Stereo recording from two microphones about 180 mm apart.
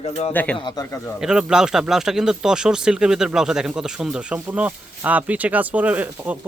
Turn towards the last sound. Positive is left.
turn(degrees=-10)  # may be behind; listen again after turning